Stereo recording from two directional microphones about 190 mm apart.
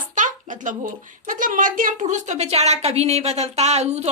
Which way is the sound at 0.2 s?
45° right (ahead or behind).